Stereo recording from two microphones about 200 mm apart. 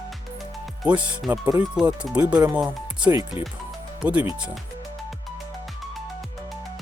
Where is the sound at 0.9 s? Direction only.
5° right (ahead or behind).